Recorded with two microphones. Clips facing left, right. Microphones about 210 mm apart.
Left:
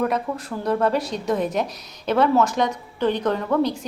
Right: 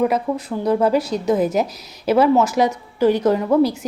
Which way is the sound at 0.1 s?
Centre (ahead or behind).